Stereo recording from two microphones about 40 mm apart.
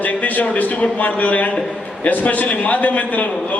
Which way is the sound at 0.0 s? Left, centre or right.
Left.